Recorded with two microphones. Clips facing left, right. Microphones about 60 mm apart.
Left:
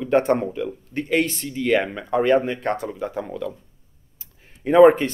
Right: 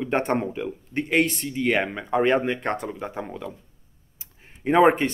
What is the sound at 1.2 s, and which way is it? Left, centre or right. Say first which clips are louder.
Speech: left 2 dB; centre.